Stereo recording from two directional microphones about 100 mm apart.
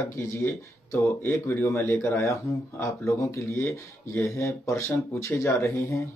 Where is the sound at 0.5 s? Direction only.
30° left (ahead or behind).